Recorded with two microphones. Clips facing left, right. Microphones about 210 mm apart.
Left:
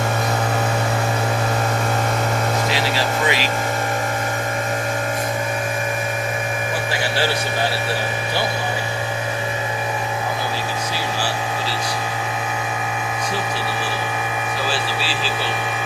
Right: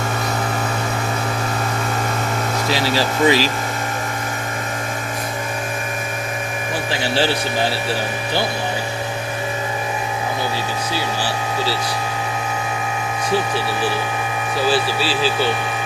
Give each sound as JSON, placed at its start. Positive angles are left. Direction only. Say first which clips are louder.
{"t": 2.7, "sound": "speech", "louder": "right 2 dB", "side_deg": -35}